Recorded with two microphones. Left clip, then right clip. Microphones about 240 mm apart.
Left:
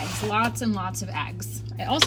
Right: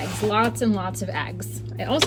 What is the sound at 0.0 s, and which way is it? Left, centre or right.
Speech, centre.